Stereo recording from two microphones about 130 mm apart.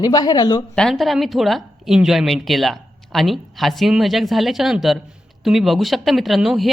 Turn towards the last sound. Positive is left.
turn(degrees=0)  # may be behind; listen again after turning